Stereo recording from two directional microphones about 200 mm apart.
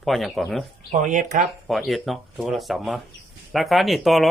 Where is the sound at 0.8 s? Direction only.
40° right (ahead or behind).